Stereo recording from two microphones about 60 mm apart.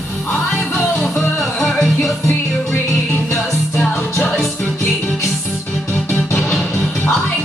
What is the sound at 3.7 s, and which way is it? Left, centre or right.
Music, left.